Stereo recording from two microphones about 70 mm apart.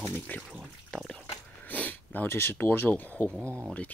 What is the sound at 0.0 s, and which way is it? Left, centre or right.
Speech, left.